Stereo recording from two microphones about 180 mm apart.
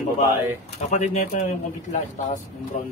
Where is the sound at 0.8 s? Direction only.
40° left (ahead or behind).